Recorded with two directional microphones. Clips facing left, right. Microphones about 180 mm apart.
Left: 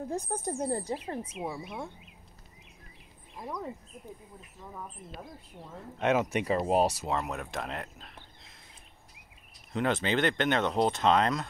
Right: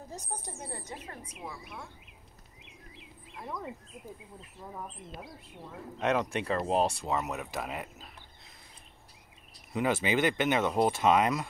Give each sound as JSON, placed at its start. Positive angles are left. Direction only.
{"t": 0.1, "sound": "a woman's voice", "side_deg": 50}
{"t": 3.5, "sound": "speech", "side_deg": -5}
{"t": 5.9, "sound": "speech", "side_deg": 5}
{"t": 9.7, "sound": "speech", "side_deg": -5}